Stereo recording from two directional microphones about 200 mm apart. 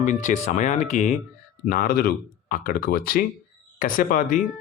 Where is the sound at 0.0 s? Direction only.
40° left (ahead or behind).